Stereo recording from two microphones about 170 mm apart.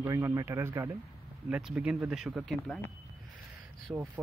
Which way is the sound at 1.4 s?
5° right (ahead or behind).